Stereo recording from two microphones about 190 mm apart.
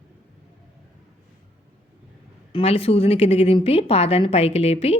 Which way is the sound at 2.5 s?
30° left (ahead or behind).